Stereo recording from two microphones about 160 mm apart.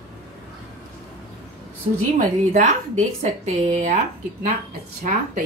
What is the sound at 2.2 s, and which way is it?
A woman's voice, 50° right (ahead or behind).